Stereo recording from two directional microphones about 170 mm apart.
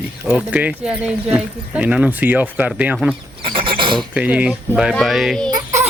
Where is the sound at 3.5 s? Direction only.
30° right (ahead or behind).